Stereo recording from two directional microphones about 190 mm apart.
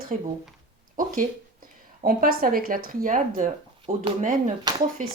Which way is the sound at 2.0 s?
45° right (ahead or behind).